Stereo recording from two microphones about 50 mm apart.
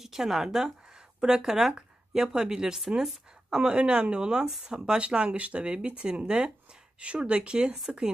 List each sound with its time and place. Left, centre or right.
0.0 s speech: centre
0.8 s a sound: centre
2.3 s speech: centre